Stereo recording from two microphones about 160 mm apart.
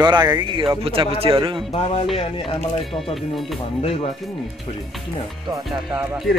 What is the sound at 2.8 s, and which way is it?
Speech, centre (ahead or behind).